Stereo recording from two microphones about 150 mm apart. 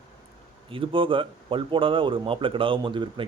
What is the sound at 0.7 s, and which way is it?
Speech, 35° right (ahead or behind).